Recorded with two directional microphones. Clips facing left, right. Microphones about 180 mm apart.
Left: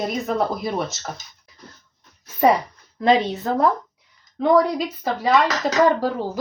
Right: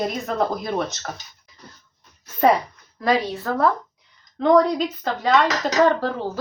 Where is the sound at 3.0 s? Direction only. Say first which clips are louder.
Left 3 dB; 25° left (ahead or behind).